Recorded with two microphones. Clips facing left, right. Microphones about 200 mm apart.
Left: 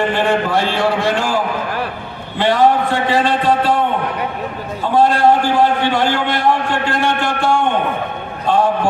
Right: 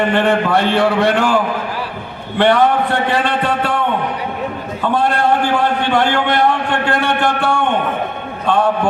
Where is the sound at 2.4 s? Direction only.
60° right (ahead or behind).